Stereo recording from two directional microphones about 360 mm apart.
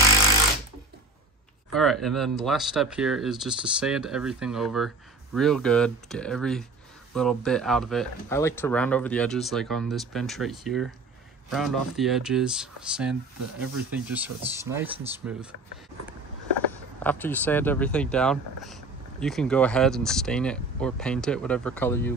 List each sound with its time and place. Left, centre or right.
1.7 s speech: centre
13.4 s speech: right
13.9 s speech: centre
17.0 s speech: centre